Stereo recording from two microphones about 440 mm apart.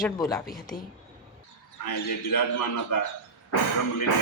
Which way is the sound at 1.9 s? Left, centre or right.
Left.